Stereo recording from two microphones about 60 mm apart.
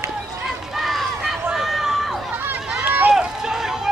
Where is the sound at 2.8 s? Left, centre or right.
Right.